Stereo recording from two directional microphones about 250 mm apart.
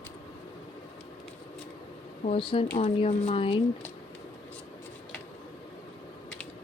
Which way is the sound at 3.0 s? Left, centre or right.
Left.